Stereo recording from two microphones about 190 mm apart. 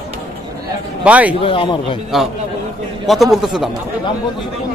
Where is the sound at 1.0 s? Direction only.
10° right (ahead or behind).